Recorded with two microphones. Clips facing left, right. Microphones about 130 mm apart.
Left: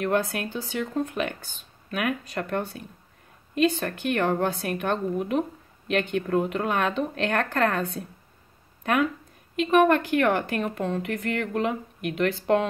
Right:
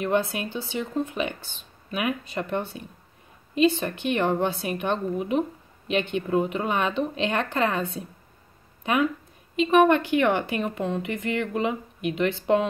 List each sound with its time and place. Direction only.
0.0 s a woman's voice: centre (ahead or behind)
8.8 s a woman's voice: centre (ahead or behind)